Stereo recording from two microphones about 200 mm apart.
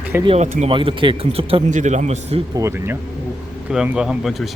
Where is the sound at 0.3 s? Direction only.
35° right (ahead or behind).